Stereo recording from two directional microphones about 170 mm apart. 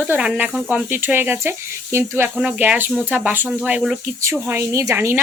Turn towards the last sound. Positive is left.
turn(degrees=-15)  # may be behind; listen again after turning